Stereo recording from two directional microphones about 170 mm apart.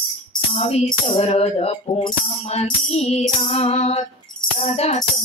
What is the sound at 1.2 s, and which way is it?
Music, 40° left (ahead or behind).